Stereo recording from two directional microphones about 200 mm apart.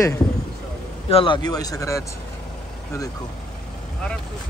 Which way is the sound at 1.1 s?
25° left (ahead or behind).